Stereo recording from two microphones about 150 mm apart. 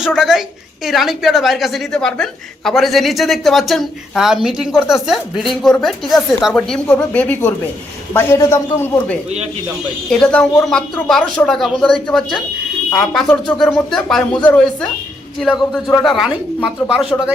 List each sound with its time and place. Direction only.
0.0 s a woman's voice: 5° right (ahead or behind); by 9.1 s 15° left (ahead or behind)
10.1 s a woman's voice: 5° left (ahead or behind)